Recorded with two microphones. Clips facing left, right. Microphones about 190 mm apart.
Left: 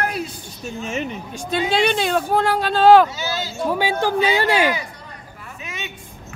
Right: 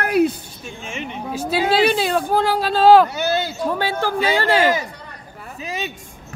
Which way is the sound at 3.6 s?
15° left (ahead or behind).